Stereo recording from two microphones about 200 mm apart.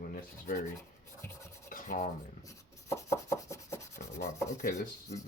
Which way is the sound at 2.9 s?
15° left (ahead or behind).